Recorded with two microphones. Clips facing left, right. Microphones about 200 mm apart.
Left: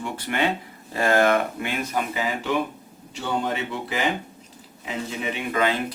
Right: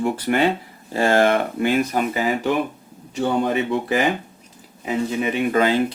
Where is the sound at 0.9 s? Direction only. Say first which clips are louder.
Right 3 dB; 30° right (ahead or behind).